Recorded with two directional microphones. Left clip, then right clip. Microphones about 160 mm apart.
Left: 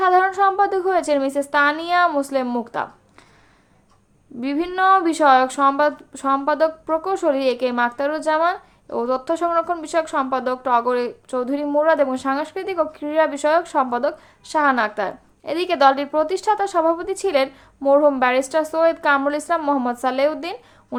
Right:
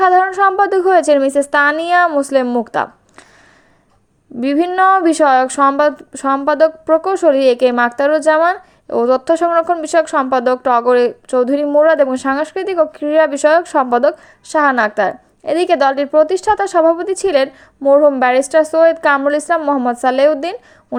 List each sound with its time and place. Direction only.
0.0 s a woman's voice: 35° right (ahead or behind)
4.4 s speech: 40° right (ahead or behind)